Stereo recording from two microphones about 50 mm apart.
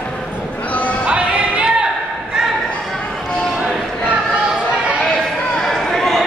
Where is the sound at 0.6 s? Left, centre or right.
Left.